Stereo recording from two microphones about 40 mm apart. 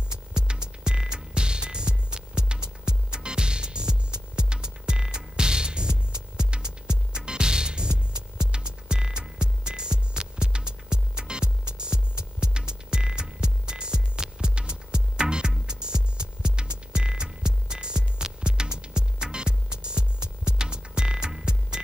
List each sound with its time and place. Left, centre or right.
0.3 s music: right